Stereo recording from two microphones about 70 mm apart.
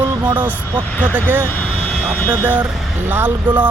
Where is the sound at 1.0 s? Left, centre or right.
Right.